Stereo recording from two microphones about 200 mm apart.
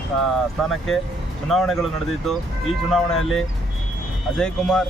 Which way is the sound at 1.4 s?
Centre (ahead or behind).